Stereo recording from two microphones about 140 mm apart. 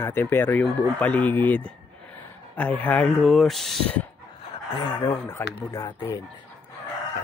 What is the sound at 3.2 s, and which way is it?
Speech, centre (ahead or behind).